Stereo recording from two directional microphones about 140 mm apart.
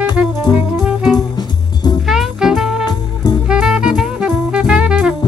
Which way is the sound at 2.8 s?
30° left (ahead or behind).